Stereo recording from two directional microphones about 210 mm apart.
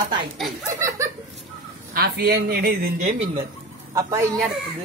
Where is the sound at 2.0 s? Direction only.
50° right (ahead or behind).